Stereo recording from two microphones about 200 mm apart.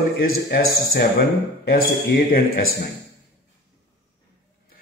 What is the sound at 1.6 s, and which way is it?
Speech, 45° left (ahead or behind).